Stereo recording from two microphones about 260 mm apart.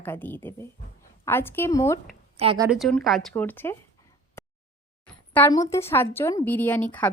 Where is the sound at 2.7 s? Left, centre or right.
Centre.